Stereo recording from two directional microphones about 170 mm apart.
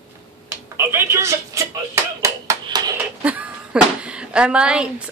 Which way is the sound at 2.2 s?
20° right (ahead or behind).